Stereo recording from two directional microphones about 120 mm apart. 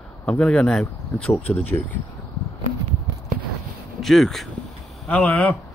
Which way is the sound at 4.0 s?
5° left (ahead or behind).